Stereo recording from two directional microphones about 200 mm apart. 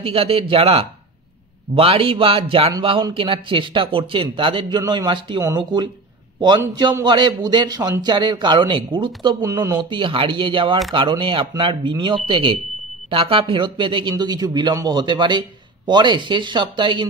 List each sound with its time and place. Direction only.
0.0 s a man's voice: 30° right (ahead or behind)